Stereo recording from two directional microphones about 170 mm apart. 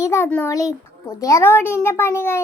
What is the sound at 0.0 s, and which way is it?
A child's voice, 15° left (ahead or behind).